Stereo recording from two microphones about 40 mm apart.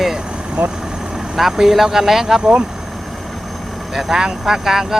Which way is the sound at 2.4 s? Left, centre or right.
Right.